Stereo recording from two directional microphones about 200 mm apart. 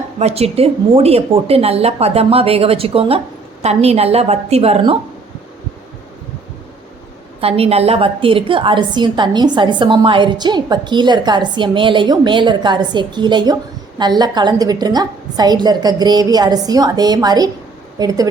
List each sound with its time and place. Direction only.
0.2 s a woman's voice: 30° right (ahead or behind)
7.4 s a woman's voice: 30° right (ahead or behind)